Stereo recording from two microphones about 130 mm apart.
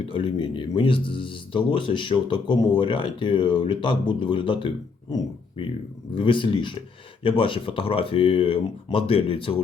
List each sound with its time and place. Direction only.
0.0 s speech: 40° left (ahead or behind)
6.1 s speech: 40° left (ahead or behind)